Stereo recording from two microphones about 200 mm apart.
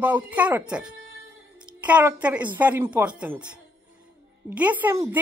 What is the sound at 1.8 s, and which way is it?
A woman's voice, 5° right (ahead or behind).